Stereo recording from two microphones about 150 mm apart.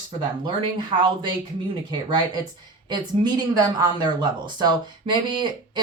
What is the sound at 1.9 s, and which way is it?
Speech, 30° right (ahead or behind).